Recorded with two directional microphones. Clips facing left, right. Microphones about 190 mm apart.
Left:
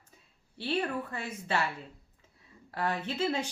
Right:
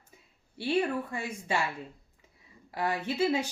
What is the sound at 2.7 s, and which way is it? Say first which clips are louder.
Speech: right 2 dB; 10° right (ahead or behind).